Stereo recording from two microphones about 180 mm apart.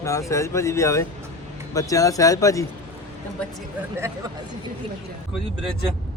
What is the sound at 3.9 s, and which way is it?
Speech, 15° right (ahead or behind).